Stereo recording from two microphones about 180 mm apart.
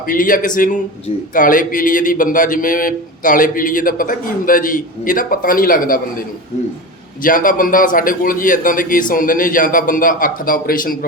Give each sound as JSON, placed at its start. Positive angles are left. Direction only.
{"t": 0.1, "sound": "a man's voice", "side_deg": 50}